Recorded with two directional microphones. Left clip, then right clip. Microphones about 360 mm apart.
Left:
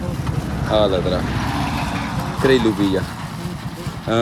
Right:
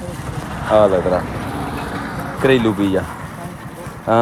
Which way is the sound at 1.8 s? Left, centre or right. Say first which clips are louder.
Left 1 dB; left.